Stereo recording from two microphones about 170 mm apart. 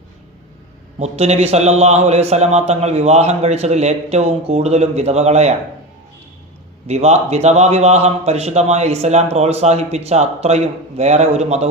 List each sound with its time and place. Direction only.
0.9 s a man's voice: 40° right (ahead or behind)
6.8 s a man's voice: 40° right (ahead or behind)